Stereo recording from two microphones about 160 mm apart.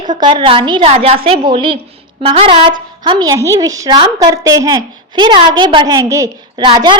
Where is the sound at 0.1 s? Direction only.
30° right (ahead or behind).